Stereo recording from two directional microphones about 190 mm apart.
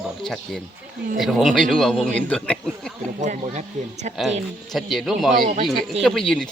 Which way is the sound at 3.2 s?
40° right (ahead or behind).